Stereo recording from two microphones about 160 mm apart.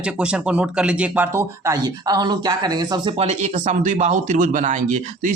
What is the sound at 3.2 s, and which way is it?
Speech, 40° right (ahead or behind).